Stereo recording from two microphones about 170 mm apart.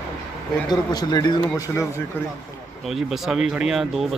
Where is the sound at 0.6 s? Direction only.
25° left (ahead or behind).